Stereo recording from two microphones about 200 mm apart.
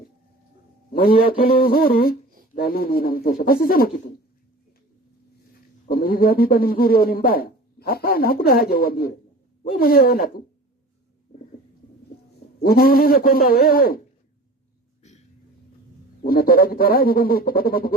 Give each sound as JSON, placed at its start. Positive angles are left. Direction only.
{"t": 0.9, "sound": "speech", "side_deg": 50}
{"t": 5.9, "sound": "speech", "side_deg": 45}
{"t": 12.5, "sound": "speech", "side_deg": 50}
{"t": 16.2, "sound": "speech", "side_deg": 45}